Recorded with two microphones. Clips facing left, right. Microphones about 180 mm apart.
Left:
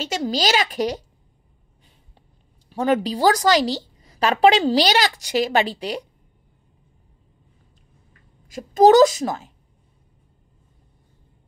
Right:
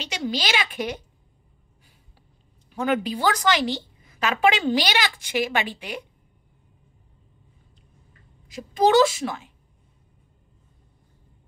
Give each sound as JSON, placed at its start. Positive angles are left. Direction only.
{"t": 0.0, "sound": "a woman's voice", "side_deg": 45}
{"t": 2.7, "sound": "a woman's voice", "side_deg": 35}
{"t": 8.5, "sound": "a woman's voice", "side_deg": 45}